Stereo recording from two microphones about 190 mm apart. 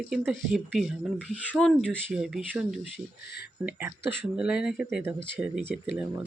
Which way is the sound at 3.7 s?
10° right (ahead or behind).